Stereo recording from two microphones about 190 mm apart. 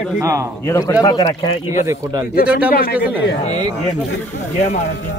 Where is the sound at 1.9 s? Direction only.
20° right (ahead or behind).